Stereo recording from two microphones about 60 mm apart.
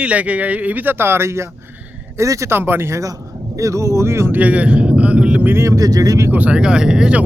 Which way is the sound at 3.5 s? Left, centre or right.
Right.